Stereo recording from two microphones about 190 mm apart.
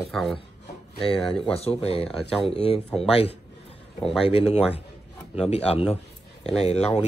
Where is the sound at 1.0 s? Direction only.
25° left (ahead or behind).